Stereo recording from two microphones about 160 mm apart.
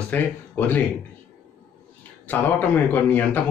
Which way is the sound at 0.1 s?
10° left (ahead or behind).